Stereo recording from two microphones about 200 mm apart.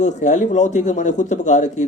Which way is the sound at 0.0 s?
40° left (ahead or behind).